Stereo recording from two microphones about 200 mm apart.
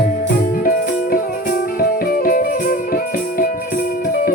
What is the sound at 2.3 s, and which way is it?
Music, 45° left (ahead or behind).